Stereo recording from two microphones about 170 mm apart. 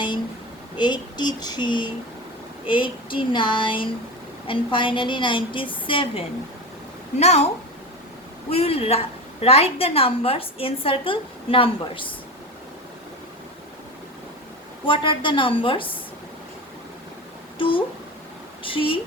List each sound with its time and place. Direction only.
0.8 s a woman's voice: 25° left (ahead or behind)
14.8 s a woman's voice: 30° left (ahead or behind)
17.6 s a woman's voice: 30° left (ahead or behind)